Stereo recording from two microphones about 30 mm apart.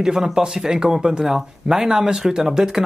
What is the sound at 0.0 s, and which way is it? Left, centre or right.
Speech, right.